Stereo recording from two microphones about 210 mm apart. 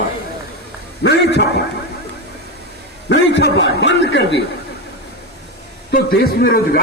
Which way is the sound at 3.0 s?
55° left (ahead or behind).